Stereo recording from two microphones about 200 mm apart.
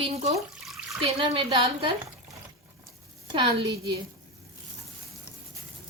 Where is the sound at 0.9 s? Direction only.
25° right (ahead or behind).